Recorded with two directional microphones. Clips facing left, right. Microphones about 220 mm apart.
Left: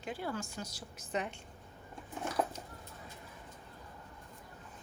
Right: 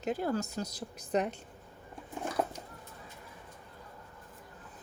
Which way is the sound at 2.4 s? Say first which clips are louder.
Right 1 dB; 10° right (ahead or behind).